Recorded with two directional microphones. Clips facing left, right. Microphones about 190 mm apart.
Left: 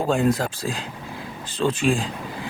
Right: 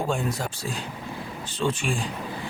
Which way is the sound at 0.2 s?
90° left.